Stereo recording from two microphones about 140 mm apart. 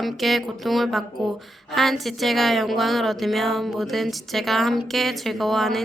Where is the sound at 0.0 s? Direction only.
Centre (ahead or behind).